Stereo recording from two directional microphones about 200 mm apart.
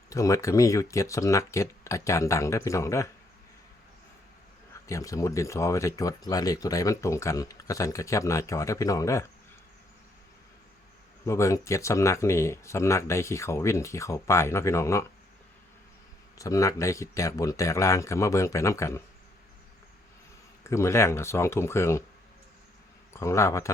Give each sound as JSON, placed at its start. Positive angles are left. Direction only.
{"t": 0.1, "sound": "speech", "side_deg": 15}
{"t": 4.9, "sound": "speech", "side_deg": 15}
{"t": 11.3, "sound": "speech", "side_deg": 15}
{"t": 16.4, "sound": "speech", "side_deg": 15}
{"t": 20.7, "sound": "speech", "side_deg": 15}
{"t": 23.1, "sound": "speech", "side_deg": 15}